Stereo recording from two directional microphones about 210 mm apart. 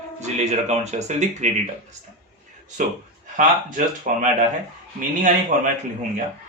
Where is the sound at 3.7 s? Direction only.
40° right (ahead or behind).